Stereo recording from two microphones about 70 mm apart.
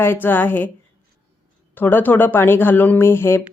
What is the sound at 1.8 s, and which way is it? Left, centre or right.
Speech, left.